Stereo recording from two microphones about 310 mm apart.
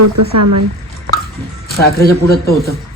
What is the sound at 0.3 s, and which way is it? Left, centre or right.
Speech, right.